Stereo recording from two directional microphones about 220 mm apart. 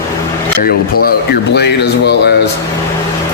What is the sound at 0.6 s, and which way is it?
Speech, 45° left (ahead or behind).